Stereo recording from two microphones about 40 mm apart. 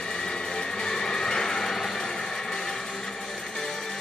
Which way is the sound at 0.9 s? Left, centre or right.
Centre.